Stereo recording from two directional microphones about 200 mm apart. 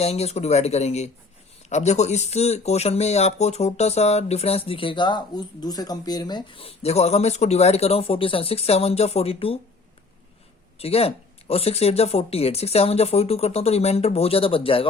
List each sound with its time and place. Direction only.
0.0 s speech: 30° left (ahead or behind)
10.8 s speech: 30° left (ahead or behind)